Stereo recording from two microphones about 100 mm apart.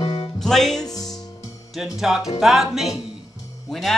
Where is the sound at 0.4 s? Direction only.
5° left (ahead or behind).